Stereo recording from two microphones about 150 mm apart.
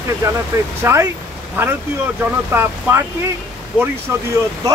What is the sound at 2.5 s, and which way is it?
Speech, 15° right (ahead or behind).